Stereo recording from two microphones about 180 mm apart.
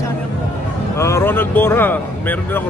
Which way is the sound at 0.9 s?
15° left (ahead or behind).